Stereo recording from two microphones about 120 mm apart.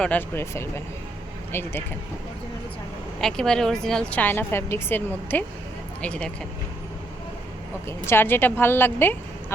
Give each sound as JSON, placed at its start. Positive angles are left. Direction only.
{"t": 0.0, "sound": "a woman's voice", "side_deg": 15}
{"t": 3.2, "sound": "a woman's voice", "side_deg": 5}
{"t": 7.9, "sound": "a woman's voice", "side_deg": 20}